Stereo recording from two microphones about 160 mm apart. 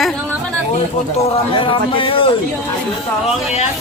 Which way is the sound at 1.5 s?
35° left (ahead or behind).